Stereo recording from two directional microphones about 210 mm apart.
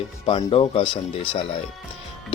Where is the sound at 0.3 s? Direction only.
25° left (ahead or behind).